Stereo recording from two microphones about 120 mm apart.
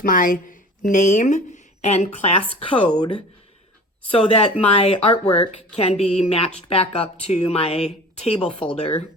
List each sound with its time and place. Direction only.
0.4 s speech: 90° left; by 2.3 s 65° left (ahead or behind)
2.6 s speech: 45° left (ahead or behind)
4.1 s speech: 50° left (ahead or behind)